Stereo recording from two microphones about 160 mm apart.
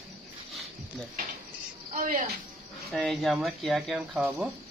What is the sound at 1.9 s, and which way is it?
Speech, 55° right (ahead or behind).